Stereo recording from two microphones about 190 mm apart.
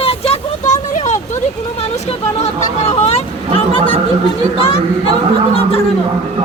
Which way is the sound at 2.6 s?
35° left (ahead or behind).